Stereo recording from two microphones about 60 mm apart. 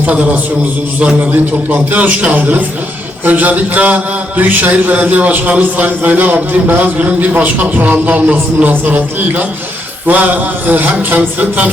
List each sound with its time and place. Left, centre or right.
0.0 s a man's voice: right
1.9 s a man's voice: right